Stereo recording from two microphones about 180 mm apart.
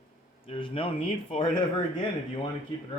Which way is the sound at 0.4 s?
30° left (ahead or behind).